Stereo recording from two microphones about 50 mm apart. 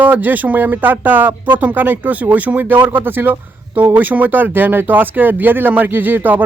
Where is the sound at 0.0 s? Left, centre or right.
Right.